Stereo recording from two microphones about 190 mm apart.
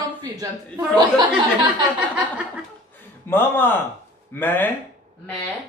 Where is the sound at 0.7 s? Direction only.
25° right (ahead or behind).